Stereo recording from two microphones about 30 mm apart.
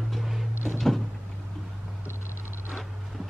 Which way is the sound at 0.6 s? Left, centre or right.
Centre.